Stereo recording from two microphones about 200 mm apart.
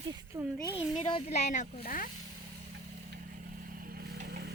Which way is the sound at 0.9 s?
30° left (ahead or behind).